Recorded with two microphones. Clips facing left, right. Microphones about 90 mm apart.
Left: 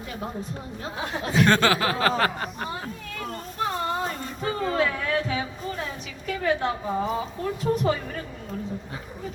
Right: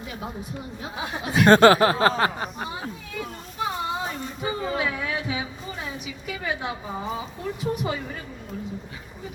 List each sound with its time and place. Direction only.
0.9 s a woman's voice: 15° right (ahead or behind)
1.5 s speech: 35° right (ahead or behind); by 2.5 s 20° right (ahead or behind)
2.6 s a sound: 10° right (ahead or behind)
6.2 s a woman's voice: 5° right (ahead or behind)